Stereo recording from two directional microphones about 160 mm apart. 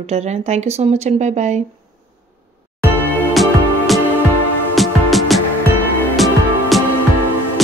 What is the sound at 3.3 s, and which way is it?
Music, centre (ahead or behind).